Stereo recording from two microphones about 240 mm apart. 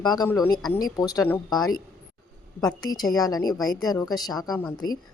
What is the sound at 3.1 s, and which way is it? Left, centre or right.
A woman's voice, centre.